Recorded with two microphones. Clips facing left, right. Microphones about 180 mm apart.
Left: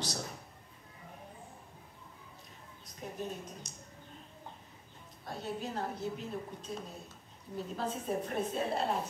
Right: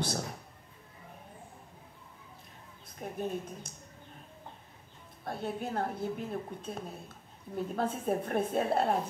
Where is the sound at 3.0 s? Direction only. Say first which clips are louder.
Right 5 dB; 55° right (ahead or behind).